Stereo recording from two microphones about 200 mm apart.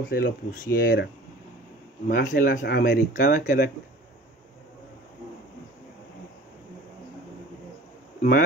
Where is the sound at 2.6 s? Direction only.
55° left (ahead or behind).